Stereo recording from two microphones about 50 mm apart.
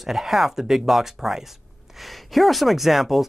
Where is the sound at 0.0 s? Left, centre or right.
Centre.